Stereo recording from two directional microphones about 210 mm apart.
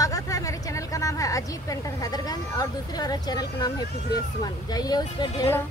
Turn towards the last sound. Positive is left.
turn(degrees=15)  # may be behind; listen again after turning